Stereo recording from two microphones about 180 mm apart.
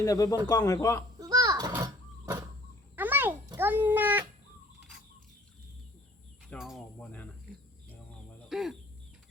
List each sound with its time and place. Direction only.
0.0 s a man's voice: 20° left (ahead or behind)
1.2 s a sound: 20° right (ahead or behind)
6.5 s bird: centre (ahead or behind)
8.4 s speech: centre (ahead or behind)